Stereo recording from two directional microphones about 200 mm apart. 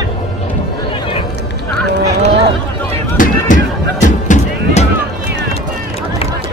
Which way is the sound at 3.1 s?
40° left (ahead or behind).